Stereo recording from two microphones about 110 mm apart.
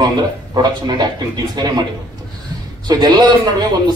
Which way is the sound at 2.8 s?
40° right (ahead or behind).